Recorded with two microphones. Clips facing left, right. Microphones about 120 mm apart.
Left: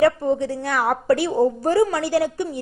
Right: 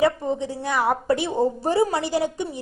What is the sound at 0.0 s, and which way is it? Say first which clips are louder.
A woman's voice: left 4 dB; 20° right (ahead or behind).